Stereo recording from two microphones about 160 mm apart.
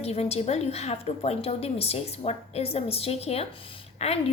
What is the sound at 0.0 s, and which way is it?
A woman's voice, 40° left (ahead or behind).